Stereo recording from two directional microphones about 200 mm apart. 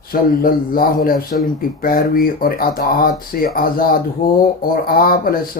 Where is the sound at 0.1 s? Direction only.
45° left (ahead or behind).